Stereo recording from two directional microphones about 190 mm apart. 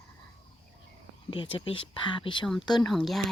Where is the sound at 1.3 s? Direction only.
30° left (ahead or behind).